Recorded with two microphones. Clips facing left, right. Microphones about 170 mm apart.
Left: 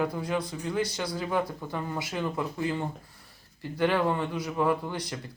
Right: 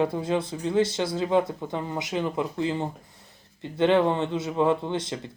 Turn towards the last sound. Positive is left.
turn(degrees=-25)  # may be behind; listen again after turning